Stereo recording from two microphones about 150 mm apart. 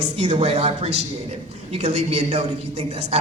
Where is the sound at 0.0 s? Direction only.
45° right (ahead or behind).